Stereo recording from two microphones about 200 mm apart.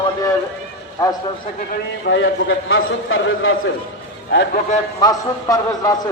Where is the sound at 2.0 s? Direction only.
65° left (ahead or behind); by 3.5 s 90° left.